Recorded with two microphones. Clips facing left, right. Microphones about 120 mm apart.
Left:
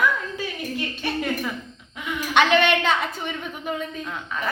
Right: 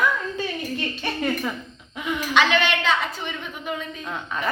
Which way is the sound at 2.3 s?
55° left (ahead or behind).